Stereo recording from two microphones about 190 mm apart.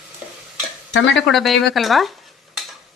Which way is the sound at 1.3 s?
Centre (ahead or behind).